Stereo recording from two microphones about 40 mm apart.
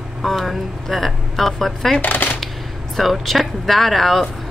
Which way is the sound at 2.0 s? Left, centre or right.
Left.